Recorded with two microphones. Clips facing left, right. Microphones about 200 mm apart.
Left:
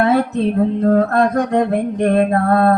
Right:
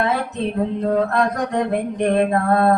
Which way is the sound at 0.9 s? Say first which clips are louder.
Left 4 dB; 50° left (ahead or behind).